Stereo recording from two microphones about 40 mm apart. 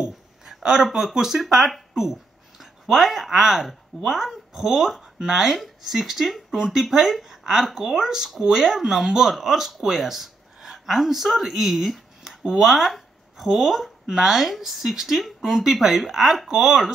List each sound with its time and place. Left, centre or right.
0.8 s speech: centre
1.4 s speech: centre